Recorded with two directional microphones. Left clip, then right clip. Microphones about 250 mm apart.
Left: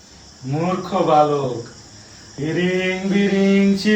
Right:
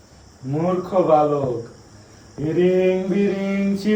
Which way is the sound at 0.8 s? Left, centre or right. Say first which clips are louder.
Left 1 dB; left.